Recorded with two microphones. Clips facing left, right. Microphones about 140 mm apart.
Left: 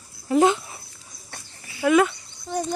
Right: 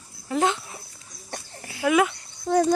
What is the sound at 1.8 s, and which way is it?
Speech, 5° right (ahead or behind).